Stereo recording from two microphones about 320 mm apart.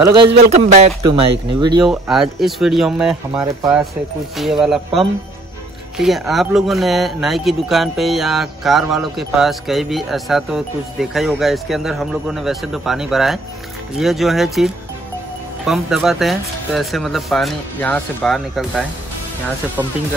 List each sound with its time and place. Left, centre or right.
0.0 s speech: centre
1.9 s speech: centre